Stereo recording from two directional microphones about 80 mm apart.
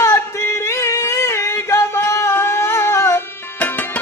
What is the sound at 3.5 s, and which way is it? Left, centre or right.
Tabla, left.